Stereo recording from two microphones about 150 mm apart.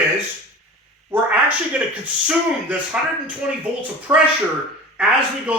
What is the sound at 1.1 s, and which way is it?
Speech, 15° right (ahead or behind).